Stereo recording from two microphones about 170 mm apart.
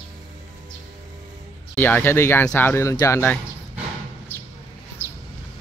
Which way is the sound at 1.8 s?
10° left (ahead or behind).